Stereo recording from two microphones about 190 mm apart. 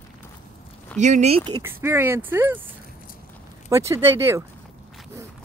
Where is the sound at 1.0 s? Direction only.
35° right (ahead or behind).